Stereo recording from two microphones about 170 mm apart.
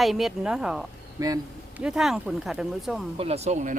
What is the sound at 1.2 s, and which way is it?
Speech, 20° right (ahead or behind).